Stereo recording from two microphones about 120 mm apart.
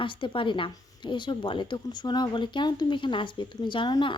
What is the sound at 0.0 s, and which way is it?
A woman's voice, 45° left (ahead or behind).